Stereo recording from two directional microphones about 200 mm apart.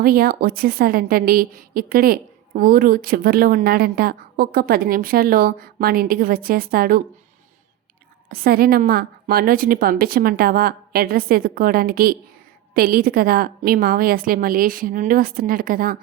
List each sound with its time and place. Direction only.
0.0 s a woman's voice: 50° right (ahead or behind)
8.3 s a woman's voice: 50° right (ahead or behind)